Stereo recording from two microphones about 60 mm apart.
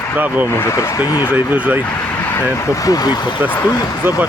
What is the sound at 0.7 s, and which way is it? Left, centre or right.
Speech, left.